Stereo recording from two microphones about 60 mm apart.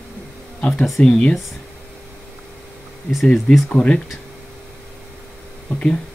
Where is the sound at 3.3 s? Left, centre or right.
Centre.